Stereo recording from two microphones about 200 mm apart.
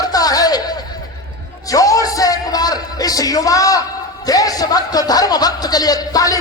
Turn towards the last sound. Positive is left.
turn(degrees=20)  # may be behind; listen again after turning